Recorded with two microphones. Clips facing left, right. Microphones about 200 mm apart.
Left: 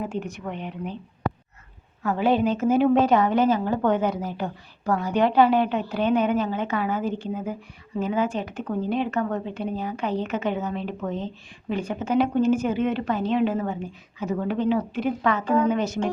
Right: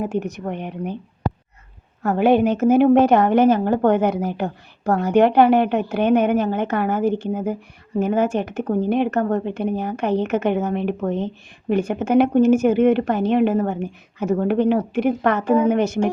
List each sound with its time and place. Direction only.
0.2 s a woman's voice: 45° right (ahead or behind)
2.0 s a woman's voice: 60° right (ahead or behind)
5.0 s a woman's voice: 65° right (ahead or behind)
15.4 s a woman's voice: 10° right (ahead or behind)